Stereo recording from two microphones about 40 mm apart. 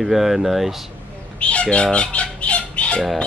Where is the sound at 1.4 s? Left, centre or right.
Left.